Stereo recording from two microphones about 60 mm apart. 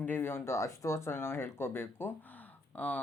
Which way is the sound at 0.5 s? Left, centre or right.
Left.